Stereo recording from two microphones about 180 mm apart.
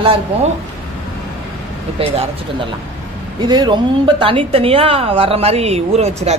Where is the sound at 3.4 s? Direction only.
25° right (ahead or behind).